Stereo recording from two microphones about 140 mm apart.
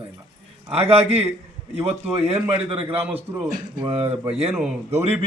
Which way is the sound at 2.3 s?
40° right (ahead or behind).